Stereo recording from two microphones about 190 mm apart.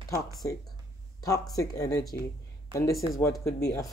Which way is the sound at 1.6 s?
20° left (ahead or behind).